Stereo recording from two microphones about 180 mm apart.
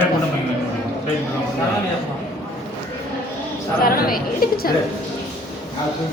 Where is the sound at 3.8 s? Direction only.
55° left (ahead or behind).